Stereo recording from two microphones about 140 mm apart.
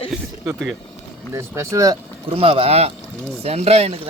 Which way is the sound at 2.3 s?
40° right (ahead or behind).